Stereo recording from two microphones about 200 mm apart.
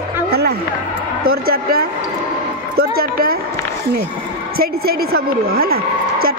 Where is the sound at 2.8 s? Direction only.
50° right (ahead or behind).